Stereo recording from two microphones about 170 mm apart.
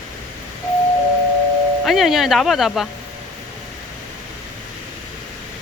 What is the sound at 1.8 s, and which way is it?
Speech, centre (ahead or behind).